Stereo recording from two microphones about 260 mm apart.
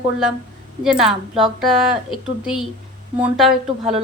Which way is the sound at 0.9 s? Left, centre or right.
Centre.